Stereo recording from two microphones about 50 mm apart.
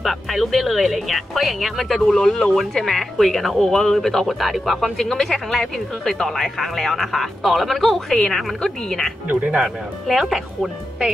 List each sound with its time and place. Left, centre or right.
0.0 s speech: centre
9.3 s speech: right
10.0 s speech: centre